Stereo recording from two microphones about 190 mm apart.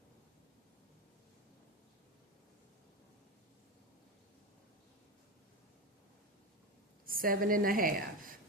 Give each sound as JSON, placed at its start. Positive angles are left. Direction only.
{"t": 7.0, "sound": "a woman's voice", "side_deg": -50}